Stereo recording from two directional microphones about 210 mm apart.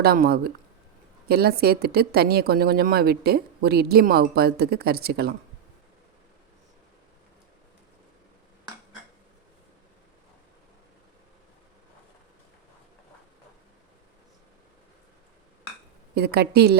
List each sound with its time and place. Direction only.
0.0 s speech: 45° right (ahead or behind)
16.1 s speech: 50° right (ahead or behind)